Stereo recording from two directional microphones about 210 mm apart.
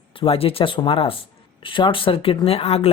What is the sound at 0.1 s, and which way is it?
Speech, 25° left (ahead or behind).